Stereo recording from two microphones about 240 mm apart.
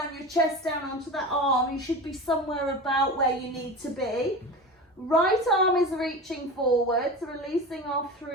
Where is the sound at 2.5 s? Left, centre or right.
Centre.